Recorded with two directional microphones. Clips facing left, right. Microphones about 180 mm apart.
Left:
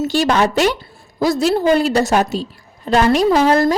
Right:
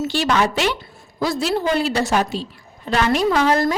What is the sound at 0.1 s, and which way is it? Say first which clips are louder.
A woman's voice: left 4 dB; 40° left (ahead or behind).